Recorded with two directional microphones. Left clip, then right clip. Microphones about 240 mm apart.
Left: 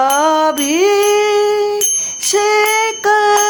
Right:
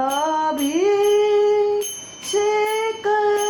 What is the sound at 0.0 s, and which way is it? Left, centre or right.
Music, left.